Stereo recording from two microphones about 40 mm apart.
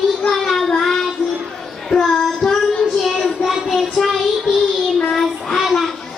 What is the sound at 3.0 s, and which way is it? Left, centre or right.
Child singing, centre.